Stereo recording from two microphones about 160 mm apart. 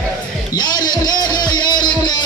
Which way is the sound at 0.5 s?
25° left (ahead or behind).